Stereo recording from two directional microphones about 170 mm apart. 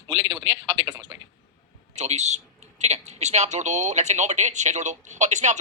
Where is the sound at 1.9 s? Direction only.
40° right (ahead or behind).